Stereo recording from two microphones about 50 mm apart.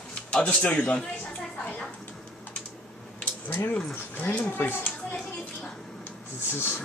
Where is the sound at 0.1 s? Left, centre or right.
Left.